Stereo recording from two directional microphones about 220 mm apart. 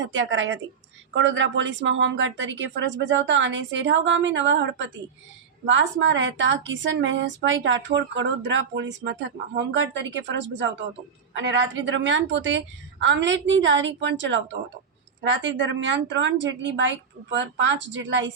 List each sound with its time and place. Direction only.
0.1 s a woman's voice: 60° right (ahead or behind)